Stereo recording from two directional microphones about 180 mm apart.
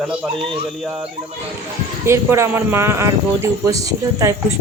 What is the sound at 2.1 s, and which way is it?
Speech, 15° right (ahead or behind).